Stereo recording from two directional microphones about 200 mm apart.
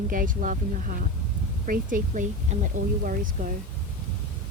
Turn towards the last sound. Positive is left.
turn(degrees=-45)  # may be behind; listen again after turning